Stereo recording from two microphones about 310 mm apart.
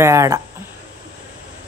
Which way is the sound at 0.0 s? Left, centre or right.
Centre.